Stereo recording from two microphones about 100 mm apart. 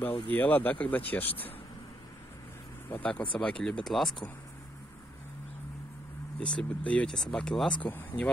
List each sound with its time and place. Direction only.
0.0 s speech: 20° left (ahead or behind)
2.9 s speech: 15° left (ahead or behind)
6.4 s speech: 10° left (ahead or behind)